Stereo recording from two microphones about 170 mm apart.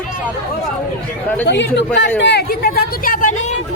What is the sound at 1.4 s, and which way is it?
Speech, 90° left.